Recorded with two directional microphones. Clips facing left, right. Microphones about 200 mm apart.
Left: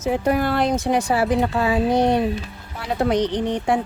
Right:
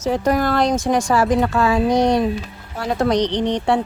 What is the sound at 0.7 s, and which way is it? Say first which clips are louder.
Speech: right 2 dB; 90° right.